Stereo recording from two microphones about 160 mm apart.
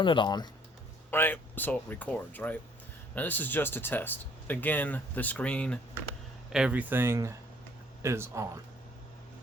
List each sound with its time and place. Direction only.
0.0 s speech: 30° left (ahead or behind)
1.1 s speech: 10° left (ahead or behind)
6.5 s speech: 5° right (ahead or behind)